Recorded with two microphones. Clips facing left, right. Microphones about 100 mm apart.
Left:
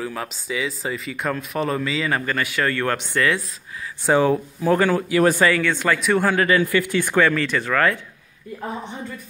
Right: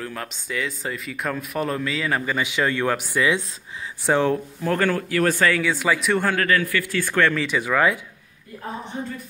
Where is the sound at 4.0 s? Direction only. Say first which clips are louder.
Left 2 dB; 5° left (ahead or behind).